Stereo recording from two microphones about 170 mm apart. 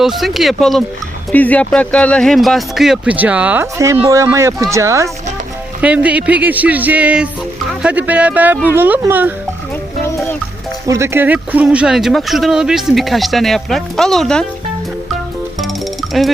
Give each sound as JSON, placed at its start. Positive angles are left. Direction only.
{"t": 0.0, "sound": "speech", "side_deg": 0}
{"t": 10.8, "sound": "speech", "side_deg": -15}
{"t": 15.6, "sound": "music", "side_deg": 0}